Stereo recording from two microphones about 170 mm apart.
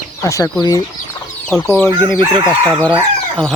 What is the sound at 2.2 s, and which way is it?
Speech, 25° right (ahead or behind).